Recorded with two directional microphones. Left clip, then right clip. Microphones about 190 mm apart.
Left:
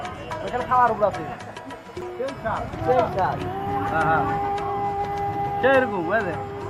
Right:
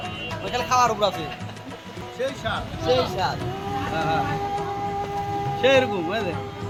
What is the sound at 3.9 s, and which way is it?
Speech, 15° right (ahead or behind).